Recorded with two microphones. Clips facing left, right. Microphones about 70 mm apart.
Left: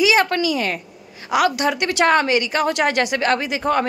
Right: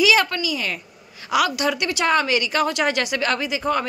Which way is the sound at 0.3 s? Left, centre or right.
Left.